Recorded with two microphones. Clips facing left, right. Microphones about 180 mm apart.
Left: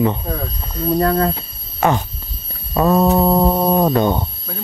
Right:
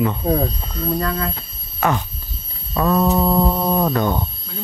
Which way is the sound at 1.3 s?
25° left (ahead or behind).